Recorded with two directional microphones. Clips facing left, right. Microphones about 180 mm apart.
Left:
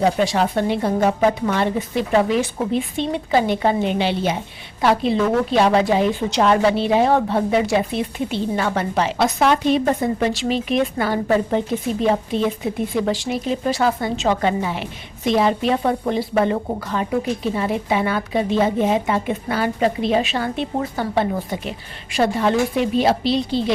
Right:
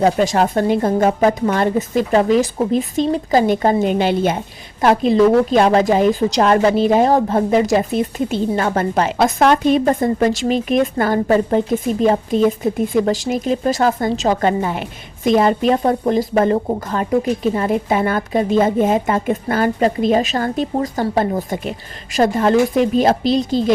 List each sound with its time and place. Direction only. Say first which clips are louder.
0.0 s a woman's voice: right 3 dB; 45° right (ahead or behind)